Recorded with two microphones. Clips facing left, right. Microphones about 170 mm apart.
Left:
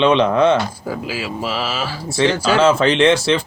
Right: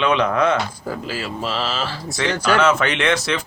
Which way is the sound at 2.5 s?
30° left (ahead or behind).